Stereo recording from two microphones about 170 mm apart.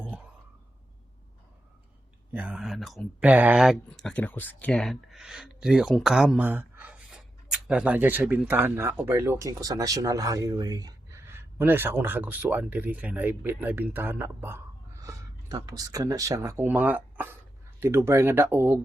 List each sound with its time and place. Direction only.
2.3 s speech: 10° right (ahead or behind)